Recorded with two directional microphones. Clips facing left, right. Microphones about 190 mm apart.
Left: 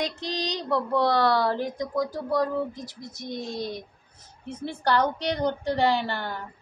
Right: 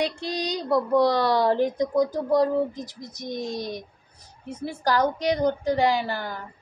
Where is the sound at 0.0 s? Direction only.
10° right (ahead or behind).